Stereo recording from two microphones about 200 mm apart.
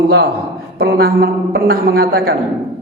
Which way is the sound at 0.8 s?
50° right (ahead or behind).